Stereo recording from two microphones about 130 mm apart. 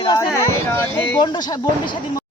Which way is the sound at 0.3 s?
20° left (ahead or behind).